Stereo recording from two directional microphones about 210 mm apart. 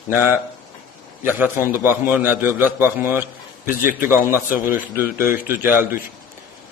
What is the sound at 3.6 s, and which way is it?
Speech, 40° left (ahead or behind).